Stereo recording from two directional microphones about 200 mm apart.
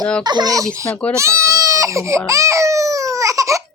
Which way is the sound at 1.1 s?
15° right (ahead or behind).